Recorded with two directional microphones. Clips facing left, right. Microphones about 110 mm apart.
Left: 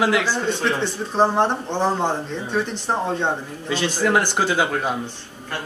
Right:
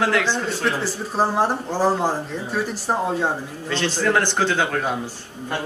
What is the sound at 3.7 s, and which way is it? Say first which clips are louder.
A man's voice: left 1 dB; 10° left (ahead or behind).